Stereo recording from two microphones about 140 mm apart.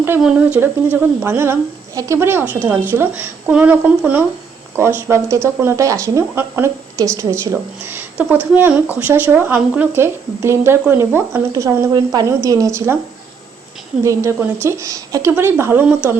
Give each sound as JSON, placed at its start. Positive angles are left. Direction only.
{"t": 0.2, "sound": "speech", "side_deg": -5}
{"t": 14.0, "sound": "speech", "side_deg": -20}